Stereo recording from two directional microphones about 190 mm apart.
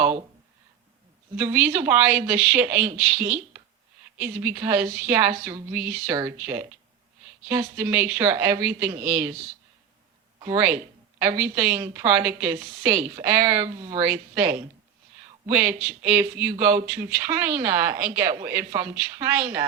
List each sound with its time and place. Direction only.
1.4 s a woman's voice: 10° right (ahead or behind)
3.2 s speech: 45° right (ahead or behind)
4.2 s a woman's voice: 10° right (ahead or behind)
10.4 s a woman's voice: 15° right (ahead or behind)
15.4 s a woman's voice: 10° right (ahead or behind)